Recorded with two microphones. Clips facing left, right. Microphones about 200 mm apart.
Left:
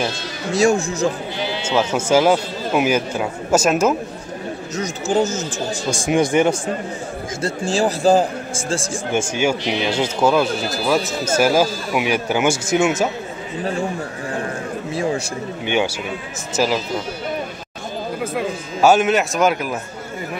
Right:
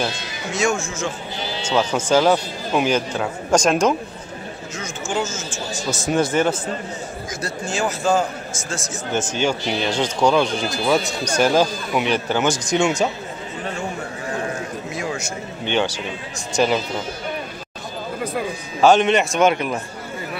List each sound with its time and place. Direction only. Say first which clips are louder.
0.5 s a man's voice: left 5 dB; 35° left (ahead or behind)
1.6 s speech: even; 5° left (ahead or behind)
4.7 s a man's voice: left 6 dB; 40° left (ahead or behind)
5.9 s speech: left 2 dB; 15° left (ahead or behind)
7.4 s a man's voice: left 5 dB; 30° left (ahead or behind)
9.1 s speech: left 2 dB; 10° left (ahead or behind)
14.9 s a man's voice: left 7 dB; 30° left (ahead or behind)
15.6 s speech: left 1 dB; 10° left (ahead or behind)
18.2 s speech: left 1 dB; 5° left (ahead or behind)